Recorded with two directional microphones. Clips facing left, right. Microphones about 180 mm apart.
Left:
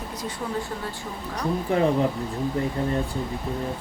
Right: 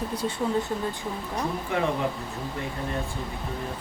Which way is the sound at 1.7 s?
35° left (ahead or behind).